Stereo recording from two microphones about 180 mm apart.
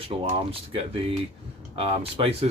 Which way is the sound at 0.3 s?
30° right (ahead or behind).